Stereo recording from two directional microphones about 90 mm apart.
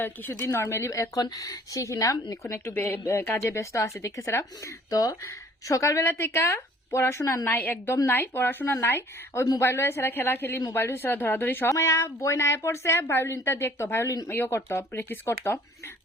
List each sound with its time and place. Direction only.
0.0 s speech: 25° left (ahead or behind)
7.6 s speech: 20° left (ahead or behind)